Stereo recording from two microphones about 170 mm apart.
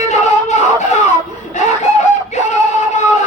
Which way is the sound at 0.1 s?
45° left (ahead or behind).